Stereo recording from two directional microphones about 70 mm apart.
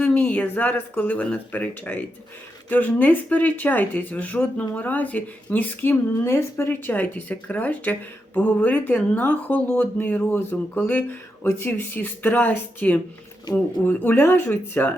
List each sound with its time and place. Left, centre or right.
0.0 s speech: left